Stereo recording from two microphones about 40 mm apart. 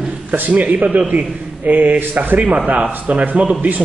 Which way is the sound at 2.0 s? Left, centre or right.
Right.